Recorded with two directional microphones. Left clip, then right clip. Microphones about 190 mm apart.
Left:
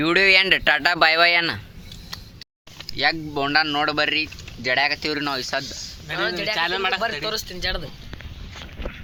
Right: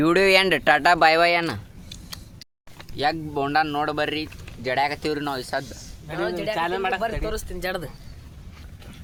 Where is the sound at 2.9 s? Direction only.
5° left (ahead or behind).